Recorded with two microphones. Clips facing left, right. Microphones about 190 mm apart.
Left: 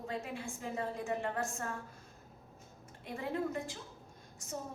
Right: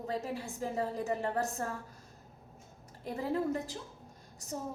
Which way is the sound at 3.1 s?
35° right (ahead or behind).